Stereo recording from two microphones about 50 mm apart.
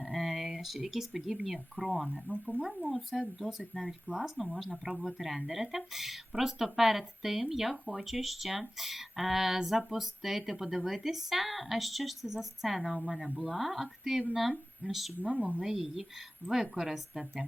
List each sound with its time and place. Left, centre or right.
0.0 s a sound: centre
1.5 s speech: centre
15.2 s speech: right
15.6 s a woman's voice: centre